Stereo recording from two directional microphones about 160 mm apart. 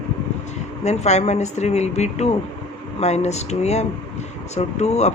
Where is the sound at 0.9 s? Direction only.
45° left (ahead or behind).